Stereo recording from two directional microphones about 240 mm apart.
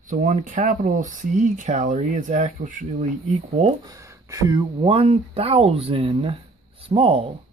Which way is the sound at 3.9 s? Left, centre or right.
Centre.